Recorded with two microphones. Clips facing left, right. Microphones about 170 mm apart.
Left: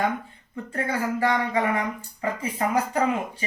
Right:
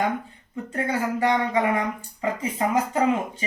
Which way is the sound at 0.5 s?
20° right (ahead or behind).